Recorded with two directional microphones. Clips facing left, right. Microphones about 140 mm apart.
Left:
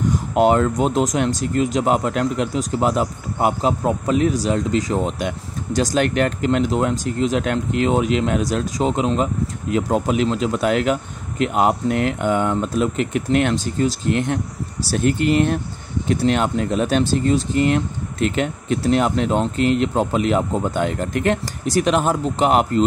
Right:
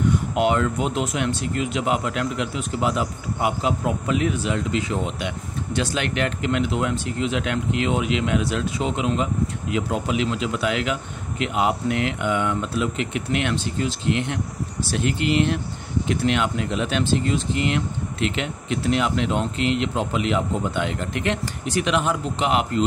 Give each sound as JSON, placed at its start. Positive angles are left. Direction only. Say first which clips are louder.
{"t": 0.1, "sound": "speech", "louder": "left 4 dB", "side_deg": 40}